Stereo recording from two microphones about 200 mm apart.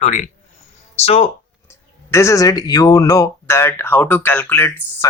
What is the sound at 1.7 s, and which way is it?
Speech, 15° left (ahead or behind).